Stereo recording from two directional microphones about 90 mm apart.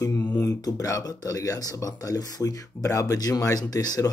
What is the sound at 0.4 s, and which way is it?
Speech, 35° left (ahead or behind).